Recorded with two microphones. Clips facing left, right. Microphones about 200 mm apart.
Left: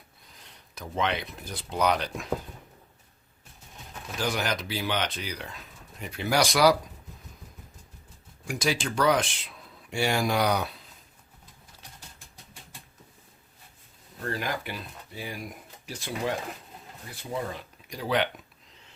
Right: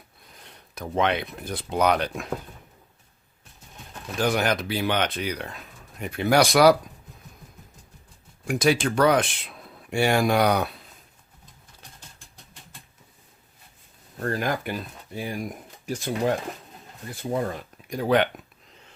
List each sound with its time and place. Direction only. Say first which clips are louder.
0.8 s speech: right 5 dB; 55° right (ahead or behind)
4.2 s speech: right 6 dB; 55° right (ahead or behind)
8.4 s speech: right 7 dB; 60° right (ahead or behind)
14.3 s speech: right 6 dB; 45° right (ahead or behind)
17.3 s speech: right 5 dB; 50° right (ahead or behind)